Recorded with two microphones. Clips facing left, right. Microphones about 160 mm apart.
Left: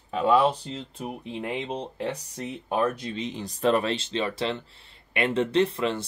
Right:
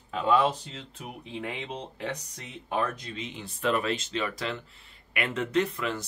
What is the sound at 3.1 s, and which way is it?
Speech, 35° left (ahead or behind).